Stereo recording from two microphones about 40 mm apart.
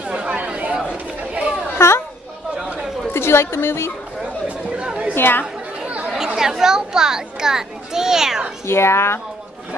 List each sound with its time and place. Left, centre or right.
0.0 s chatter: right
1.8 s a child's voice: left
2.5 s chatter: right
3.1 s a woman's voice: left
4.2 s chatter: right
5.1 s speech: left
5.9 s chatter: right
6.1 s speech: centre
8.6 s speech: left